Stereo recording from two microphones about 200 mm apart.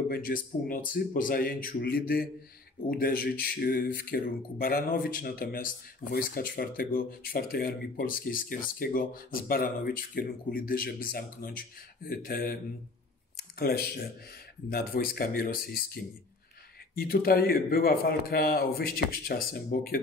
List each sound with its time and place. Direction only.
0.1 s speech: 45° left (ahead or behind)
13.6 s speech: 50° left (ahead or behind)